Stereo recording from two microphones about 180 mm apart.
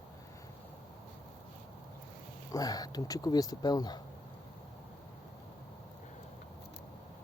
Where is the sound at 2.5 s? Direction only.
20° left (ahead or behind).